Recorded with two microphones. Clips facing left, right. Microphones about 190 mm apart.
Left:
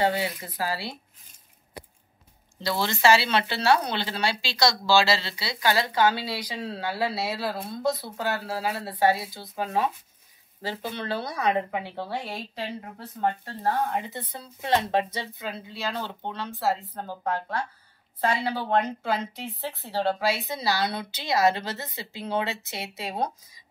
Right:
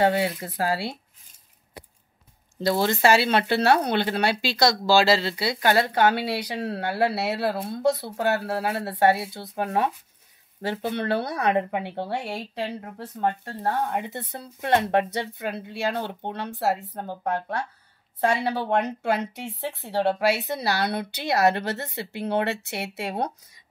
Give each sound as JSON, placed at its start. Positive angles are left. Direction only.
{"t": 0.0, "sound": "speech", "side_deg": -55}
{"t": 2.6, "sound": "speech", "side_deg": -45}
{"t": 13.6, "sound": "speech", "side_deg": -55}
{"t": 18.2, "sound": "speech", "side_deg": -60}